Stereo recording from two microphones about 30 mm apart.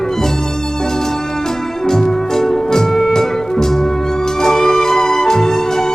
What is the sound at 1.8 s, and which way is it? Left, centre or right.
Music, centre.